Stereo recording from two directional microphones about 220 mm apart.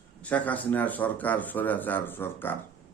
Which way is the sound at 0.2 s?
5° left (ahead or behind).